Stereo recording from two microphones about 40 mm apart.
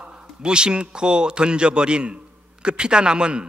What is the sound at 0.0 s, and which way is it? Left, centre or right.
Speech, right.